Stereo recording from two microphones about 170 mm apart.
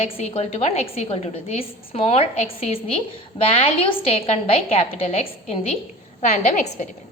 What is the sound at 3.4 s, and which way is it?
A woman's voice, 35° left (ahead or behind).